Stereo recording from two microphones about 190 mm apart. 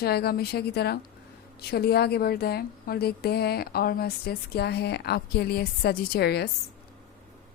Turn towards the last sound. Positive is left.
turn(degrees=55)  # may be behind; listen again after turning